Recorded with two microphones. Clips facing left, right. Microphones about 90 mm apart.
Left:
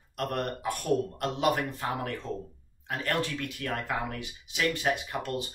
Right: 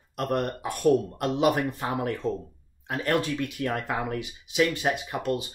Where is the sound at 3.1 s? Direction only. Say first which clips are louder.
Right 5 dB; 20° right (ahead or behind).